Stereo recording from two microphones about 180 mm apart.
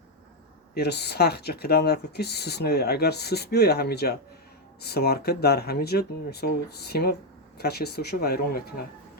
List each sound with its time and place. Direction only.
0.7 s speech: 65° left (ahead or behind)